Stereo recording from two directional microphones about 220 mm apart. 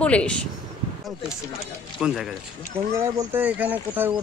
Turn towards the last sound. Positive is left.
turn(degrees=-10)  # may be behind; listen again after turning